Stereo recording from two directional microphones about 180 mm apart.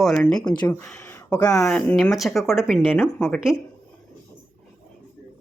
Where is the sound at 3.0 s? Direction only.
15° left (ahead or behind).